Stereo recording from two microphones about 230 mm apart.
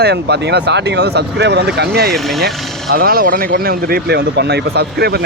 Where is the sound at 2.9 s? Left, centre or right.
Right.